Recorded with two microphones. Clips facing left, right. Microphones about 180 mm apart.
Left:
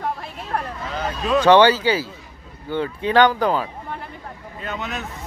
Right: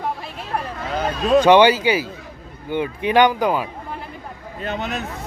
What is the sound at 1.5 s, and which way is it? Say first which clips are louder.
Speech: left 1 dB; 15° right (ahead or behind).